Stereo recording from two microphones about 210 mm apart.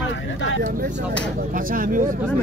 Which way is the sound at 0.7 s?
35° right (ahead or behind).